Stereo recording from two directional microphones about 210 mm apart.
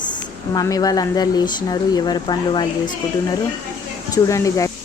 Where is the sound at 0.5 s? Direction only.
15° left (ahead or behind).